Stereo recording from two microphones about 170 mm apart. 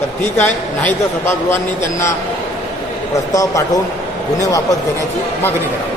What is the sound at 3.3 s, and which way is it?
A man's voice, 20° left (ahead or behind).